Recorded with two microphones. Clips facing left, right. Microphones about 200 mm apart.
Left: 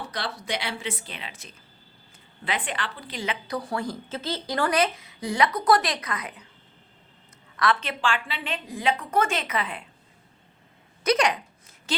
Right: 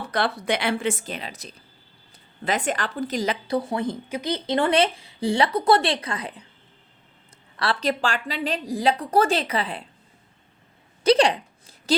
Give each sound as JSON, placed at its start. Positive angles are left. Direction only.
{"t": 0.0, "sound": "speech", "side_deg": -55}
{"t": 3.4, "sound": "speech", "side_deg": -25}
{"t": 7.5, "sound": "a woman's voice", "side_deg": -30}
{"t": 11.0, "sound": "a sound", "side_deg": -30}